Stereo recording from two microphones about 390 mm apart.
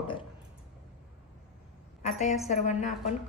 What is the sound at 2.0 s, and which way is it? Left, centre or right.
Speech, centre.